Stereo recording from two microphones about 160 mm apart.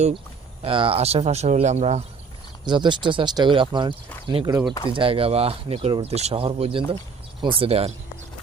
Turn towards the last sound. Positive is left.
turn(degrees=-40)  # may be behind; listen again after turning